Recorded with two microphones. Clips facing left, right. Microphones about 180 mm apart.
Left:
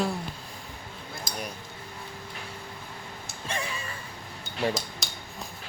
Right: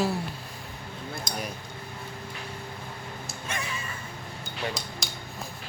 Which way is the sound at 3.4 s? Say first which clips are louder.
Left 2 dB; 30° left (ahead or behind).